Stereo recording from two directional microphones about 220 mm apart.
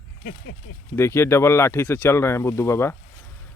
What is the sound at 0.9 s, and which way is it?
Speech, 10° left (ahead or behind).